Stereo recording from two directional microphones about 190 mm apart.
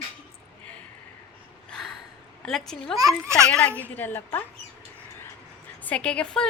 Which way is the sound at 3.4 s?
5° left (ahead or behind).